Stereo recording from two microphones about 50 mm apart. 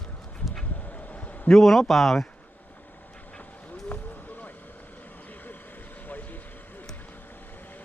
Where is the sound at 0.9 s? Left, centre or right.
Left.